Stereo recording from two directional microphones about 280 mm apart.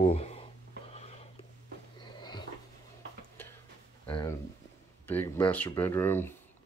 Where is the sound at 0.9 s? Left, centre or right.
Left.